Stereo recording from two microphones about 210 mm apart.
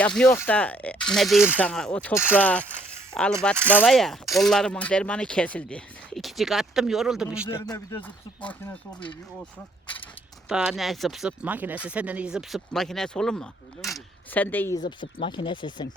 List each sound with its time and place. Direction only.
0.0 s speech: 5° left (ahead or behind)
7.4 s speech: 15° left (ahead or behind)
10.5 s speech: 5° right (ahead or behind)
14.8 s speech: 20° left (ahead or behind)